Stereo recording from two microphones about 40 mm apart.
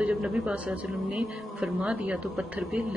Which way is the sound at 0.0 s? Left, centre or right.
Right.